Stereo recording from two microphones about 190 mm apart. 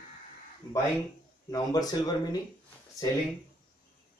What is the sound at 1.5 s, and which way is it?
Speech, 20° left (ahead or behind).